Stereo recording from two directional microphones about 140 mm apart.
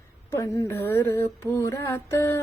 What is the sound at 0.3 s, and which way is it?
Mantra, 20° left (ahead or behind).